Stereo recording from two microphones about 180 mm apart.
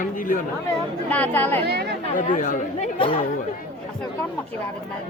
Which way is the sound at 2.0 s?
45° left (ahead or behind).